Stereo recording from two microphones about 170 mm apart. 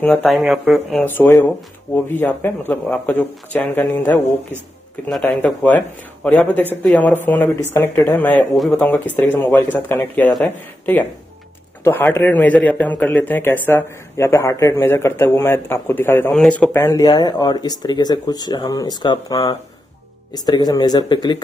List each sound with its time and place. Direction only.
0.0 s speech: 5° left (ahead or behind)
1.0 s a man's voice: 10° left (ahead or behind)